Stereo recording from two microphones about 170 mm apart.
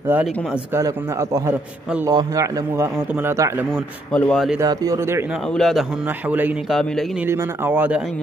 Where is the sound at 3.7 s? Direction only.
5° left (ahead or behind).